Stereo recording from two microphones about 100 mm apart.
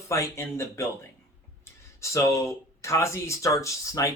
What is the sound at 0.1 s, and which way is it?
Speech, 30° left (ahead or behind).